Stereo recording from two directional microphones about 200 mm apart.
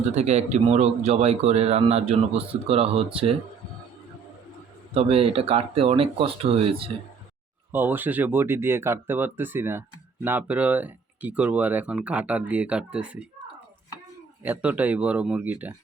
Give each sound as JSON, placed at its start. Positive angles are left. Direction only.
{"t": 0.1, "sound": "a man's voice", "side_deg": -35}
{"t": 4.9, "sound": "speech", "side_deg": -30}
{"t": 7.7, "sound": "speech", "side_deg": -10}
{"t": 14.4, "sound": "speech", "side_deg": -5}